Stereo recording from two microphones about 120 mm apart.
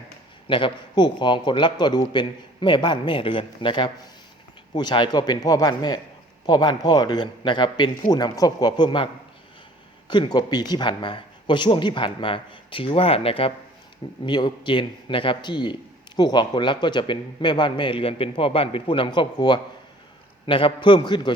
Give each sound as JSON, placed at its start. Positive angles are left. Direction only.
{"t": 0.4, "sound": "a man's voice", "side_deg": 45}
{"t": 10.1, "sound": "a man's voice", "side_deg": 35}
{"t": 14.3, "sound": "a man's voice", "side_deg": 40}